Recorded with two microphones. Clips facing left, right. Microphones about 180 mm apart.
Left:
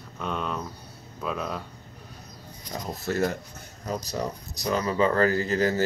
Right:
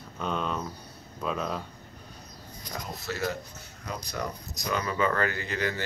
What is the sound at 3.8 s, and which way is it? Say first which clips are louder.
Speech: left 5 dB; 35° left (ahead or behind).